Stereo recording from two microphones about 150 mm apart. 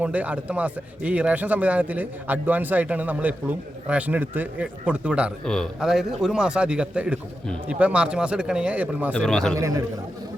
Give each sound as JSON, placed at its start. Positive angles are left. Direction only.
{"t": 0.0, "sound": "a man's voice", "side_deg": -10}
{"t": 9.1, "sound": "a man's voice", "side_deg": 5}
{"t": 9.6, "sound": "a man's voice", "side_deg": -20}